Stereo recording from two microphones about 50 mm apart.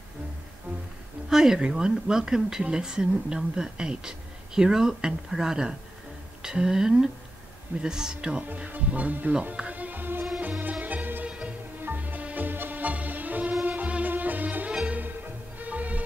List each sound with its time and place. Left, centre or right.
0.7 s music: right
1.3 s speech: centre
8.6 s speech: right
9.7 s music: right
11.2 s music: centre
11.8 s music: right